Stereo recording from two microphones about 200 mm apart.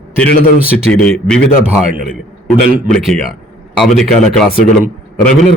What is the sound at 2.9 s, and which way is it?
Speech, centre (ahead or behind).